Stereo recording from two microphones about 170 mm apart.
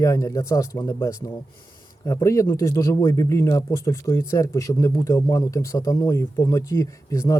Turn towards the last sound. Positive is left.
turn(degrees=20)  # may be behind; listen again after turning